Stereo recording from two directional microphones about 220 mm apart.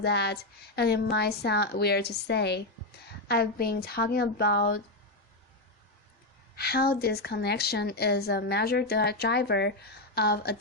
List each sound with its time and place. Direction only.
0.0 s speech: 50° left (ahead or behind)
6.6 s speech: 45° left (ahead or behind)